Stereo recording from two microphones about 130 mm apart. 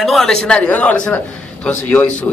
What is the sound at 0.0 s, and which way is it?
Speech, 5° left (ahead or behind).